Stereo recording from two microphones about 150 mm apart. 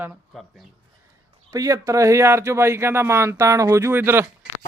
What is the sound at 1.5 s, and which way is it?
Speech, 20° right (ahead or behind).